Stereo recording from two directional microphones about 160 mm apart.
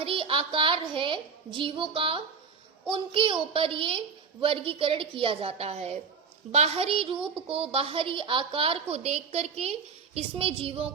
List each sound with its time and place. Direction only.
0.0 s a woman's voice: 35° right (ahead or behind)